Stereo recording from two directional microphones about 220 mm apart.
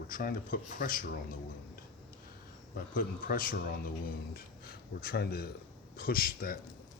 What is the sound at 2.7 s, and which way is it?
Speech, 40° left (ahead or behind).